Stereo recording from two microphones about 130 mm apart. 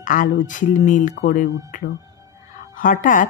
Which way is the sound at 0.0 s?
85° left.